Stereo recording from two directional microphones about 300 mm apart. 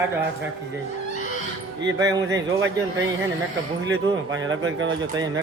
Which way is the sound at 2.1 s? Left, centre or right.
Right.